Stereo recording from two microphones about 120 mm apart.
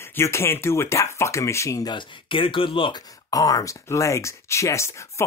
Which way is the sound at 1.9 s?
40° left (ahead or behind).